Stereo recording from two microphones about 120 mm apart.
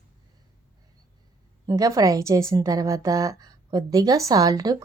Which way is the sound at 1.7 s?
30° right (ahead or behind).